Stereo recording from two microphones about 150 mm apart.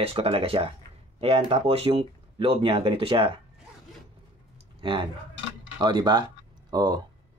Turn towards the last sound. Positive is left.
turn(degrees=-25)  # may be behind; listen again after turning